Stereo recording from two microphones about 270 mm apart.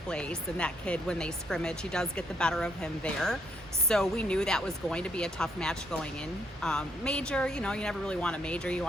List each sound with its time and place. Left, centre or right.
0.1 s speech: centre